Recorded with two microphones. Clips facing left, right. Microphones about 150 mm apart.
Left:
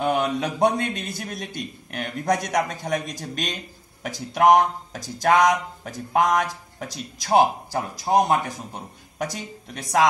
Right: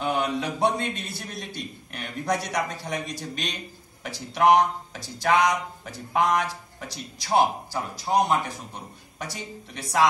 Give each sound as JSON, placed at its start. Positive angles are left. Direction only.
{"t": 0.0, "sound": "a man's voice", "side_deg": 50}